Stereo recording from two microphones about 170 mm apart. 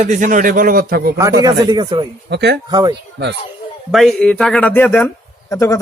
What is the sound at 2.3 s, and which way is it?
Speech, 90° right.